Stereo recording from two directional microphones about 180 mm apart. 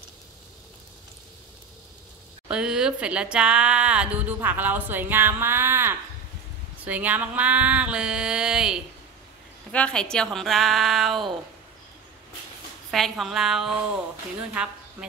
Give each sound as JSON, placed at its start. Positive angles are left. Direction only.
{"t": 2.4, "sound": "a woman's voice", "side_deg": -5}
{"t": 12.9, "sound": "a woman's voice", "side_deg": 0}